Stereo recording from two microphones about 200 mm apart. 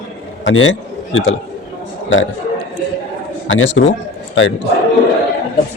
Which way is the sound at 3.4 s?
70° left (ahead or behind).